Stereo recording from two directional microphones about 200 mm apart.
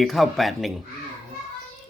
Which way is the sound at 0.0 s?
Centre (ahead or behind).